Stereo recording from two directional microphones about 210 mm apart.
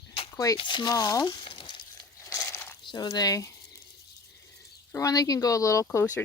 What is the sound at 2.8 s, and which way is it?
Speech, 20° left (ahead or behind).